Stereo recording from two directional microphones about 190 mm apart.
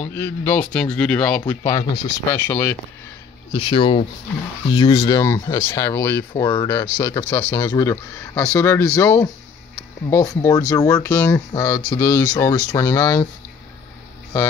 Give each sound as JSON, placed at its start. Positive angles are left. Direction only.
{"t": 0.0, "sound": "speech", "side_deg": 10}
{"t": 1.5, "sound": "speech", "side_deg": 15}
{"t": 3.5, "sound": "speech", "side_deg": 25}